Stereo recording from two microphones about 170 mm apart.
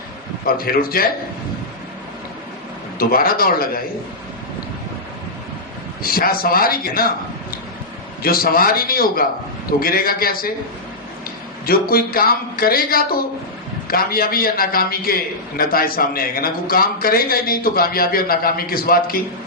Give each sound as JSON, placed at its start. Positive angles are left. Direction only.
{"t": 0.4, "sound": "a man's voice", "side_deg": 60}
{"t": 3.0, "sound": "a man's voice", "side_deg": 60}
{"t": 6.0, "sound": "a man's voice", "side_deg": 60}
{"t": 8.2, "sound": "a man's voice", "side_deg": 60}
{"t": 11.6, "sound": "a man's voice", "side_deg": 60}